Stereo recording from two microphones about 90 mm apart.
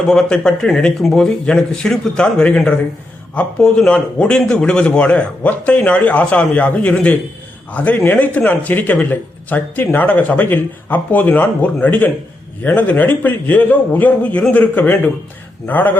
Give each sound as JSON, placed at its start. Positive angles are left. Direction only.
{"t": 0.1, "sound": "a man's voice", "side_deg": 5}